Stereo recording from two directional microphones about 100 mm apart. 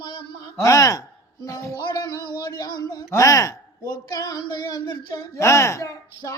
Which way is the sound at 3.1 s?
30° left (ahead or behind).